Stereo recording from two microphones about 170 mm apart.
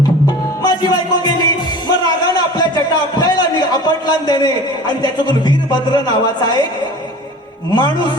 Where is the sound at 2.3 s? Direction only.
25° left (ahead or behind).